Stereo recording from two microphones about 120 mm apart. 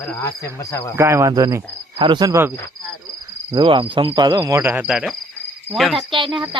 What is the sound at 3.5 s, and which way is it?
Cricket, 40° right (ahead or behind).